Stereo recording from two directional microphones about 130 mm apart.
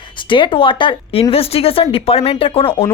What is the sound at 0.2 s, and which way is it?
Speech, 40° left (ahead or behind).